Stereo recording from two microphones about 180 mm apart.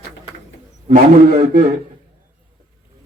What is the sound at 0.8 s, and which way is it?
Speech, 40° right (ahead or behind).